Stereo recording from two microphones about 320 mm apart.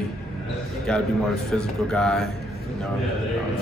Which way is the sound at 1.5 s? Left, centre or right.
Centre.